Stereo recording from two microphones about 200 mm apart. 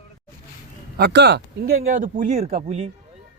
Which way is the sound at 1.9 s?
40° right (ahead or behind).